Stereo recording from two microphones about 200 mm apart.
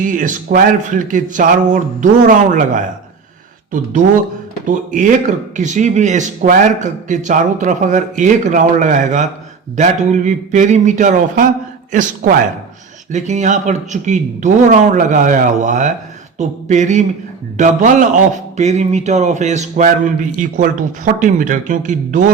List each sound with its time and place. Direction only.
0.0 s speech: 40° right (ahead or behind)
4.6 s speech: 40° right (ahead or behind)